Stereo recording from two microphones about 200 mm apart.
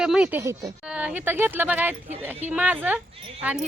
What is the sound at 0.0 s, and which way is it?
A woman's voice, 5° right (ahead or behind).